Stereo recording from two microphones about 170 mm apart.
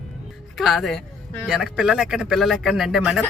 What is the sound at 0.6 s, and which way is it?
Speech, centre (ahead or behind).